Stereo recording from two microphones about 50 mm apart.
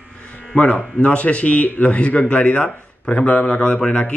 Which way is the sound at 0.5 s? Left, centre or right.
Left.